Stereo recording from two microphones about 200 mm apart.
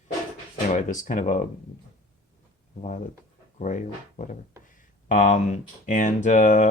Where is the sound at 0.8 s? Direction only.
40° left (ahead or behind).